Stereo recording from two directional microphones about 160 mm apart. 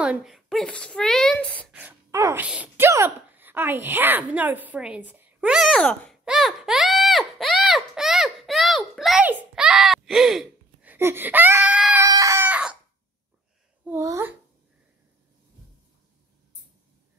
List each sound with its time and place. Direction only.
0.0 s a woman's voice: 5° right (ahead or behind)
1.7 s wail: 10° right (ahead or behind)
2.0 s speech: 20° right (ahead or behind)
2.4 s speech: 10° right (ahead or behind)
12.0 s chicken: 20° right (ahead or behind)
13.8 s a child's voice: 20° right (ahead or behind)